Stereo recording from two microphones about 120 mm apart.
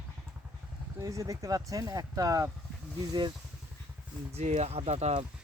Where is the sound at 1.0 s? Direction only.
25° right (ahead or behind).